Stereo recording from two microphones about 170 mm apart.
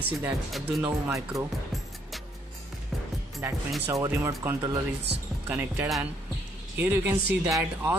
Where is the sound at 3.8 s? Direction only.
15° right (ahead or behind).